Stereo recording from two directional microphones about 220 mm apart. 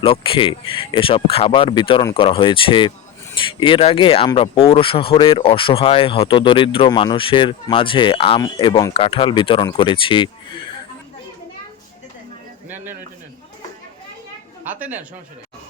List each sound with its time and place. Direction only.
0.0 s speech: 25° left (ahead or behind)
14.7 s speech: 5° right (ahead or behind)